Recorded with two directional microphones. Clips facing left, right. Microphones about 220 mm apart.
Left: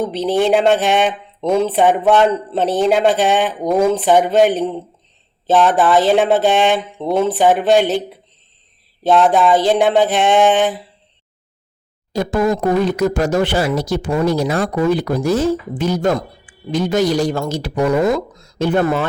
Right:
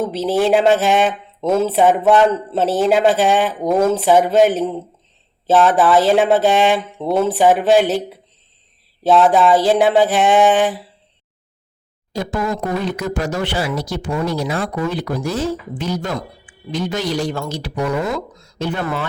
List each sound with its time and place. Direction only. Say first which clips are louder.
0.0 s speech: left 1 dB; 5° right (ahead or behind)
12.1 s speech: left 5 dB; 50° left (ahead or behind)